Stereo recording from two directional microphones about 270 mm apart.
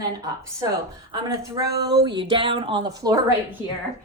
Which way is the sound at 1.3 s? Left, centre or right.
Centre.